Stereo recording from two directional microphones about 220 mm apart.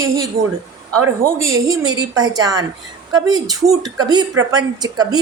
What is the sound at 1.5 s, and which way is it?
A woman's voice, 15° right (ahead or behind).